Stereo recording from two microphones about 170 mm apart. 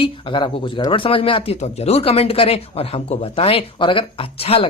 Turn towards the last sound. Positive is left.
turn(degrees=35)  # may be behind; listen again after turning